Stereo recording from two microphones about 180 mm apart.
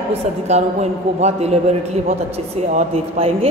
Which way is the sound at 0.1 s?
40° right (ahead or behind).